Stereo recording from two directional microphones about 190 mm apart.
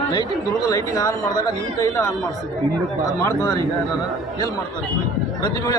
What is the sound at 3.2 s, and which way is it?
Speech, 15° left (ahead or behind).